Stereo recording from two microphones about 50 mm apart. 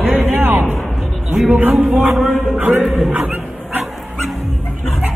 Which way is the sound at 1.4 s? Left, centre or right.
Right.